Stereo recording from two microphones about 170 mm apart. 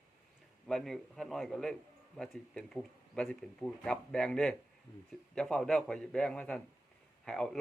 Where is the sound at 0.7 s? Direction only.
Centre (ahead or behind).